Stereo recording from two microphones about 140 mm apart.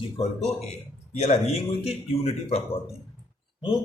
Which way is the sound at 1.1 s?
50° left (ahead or behind).